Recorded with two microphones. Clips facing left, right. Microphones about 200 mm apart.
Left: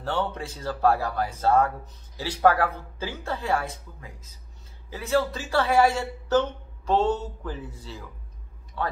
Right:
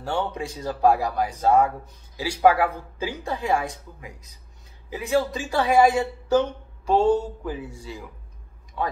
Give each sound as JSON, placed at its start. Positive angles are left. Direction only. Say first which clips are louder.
{"t": 0.0, "sound": "speech", "louder": "right 1 dB", "side_deg": -10}